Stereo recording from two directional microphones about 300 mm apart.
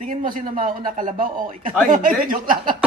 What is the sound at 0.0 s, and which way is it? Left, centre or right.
Speech, right.